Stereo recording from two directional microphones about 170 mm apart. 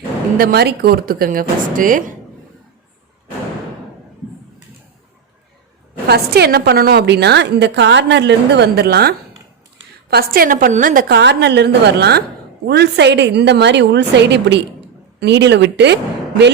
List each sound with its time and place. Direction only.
0.3 s speech: 65° right (ahead or behind)
6.1 s a woman's voice: 70° right (ahead or behind); by 11.0 s 50° right (ahead or behind)
11.1 s a woman's voice: 85° right